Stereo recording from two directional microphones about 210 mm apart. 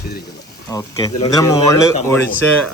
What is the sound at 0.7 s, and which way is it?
Speech, 20° left (ahead or behind).